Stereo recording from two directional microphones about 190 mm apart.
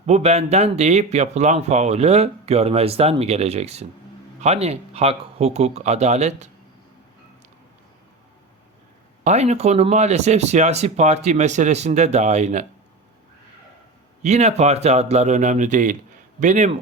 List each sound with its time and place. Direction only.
0.0 s speech: 35° right (ahead or behind)
9.2 s speech: 35° right (ahead or behind)
14.2 s speech: 35° right (ahead or behind)